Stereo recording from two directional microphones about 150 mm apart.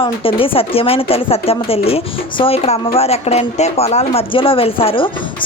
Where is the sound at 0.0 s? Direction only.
35° left (ahead or behind).